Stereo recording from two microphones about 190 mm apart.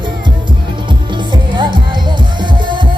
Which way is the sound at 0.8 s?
25° right (ahead or behind).